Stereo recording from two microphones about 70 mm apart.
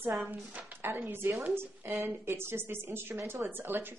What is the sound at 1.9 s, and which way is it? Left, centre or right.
Speech, right.